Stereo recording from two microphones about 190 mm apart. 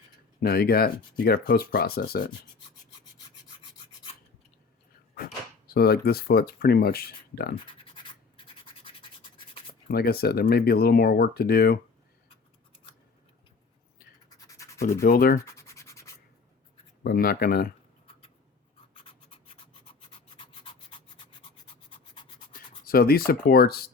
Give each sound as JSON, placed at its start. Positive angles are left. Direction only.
{"t": 0.4, "sound": "speech", "side_deg": 55}
{"t": 5.1, "sound": "speech", "side_deg": 55}
{"t": 8.4, "sound": "rub", "side_deg": 25}
{"t": 9.9, "sound": "speech", "side_deg": 55}
{"t": 14.3, "sound": "a sound", "side_deg": 20}
{"t": 15.0, "sound": "speech", "side_deg": 50}
{"t": 15.5, "sound": "a sound", "side_deg": 15}
{"t": 17.0, "sound": "speech", "side_deg": 55}
{"t": 19.0, "sound": "rub", "side_deg": 30}
{"t": 22.5, "sound": "speech", "side_deg": 50}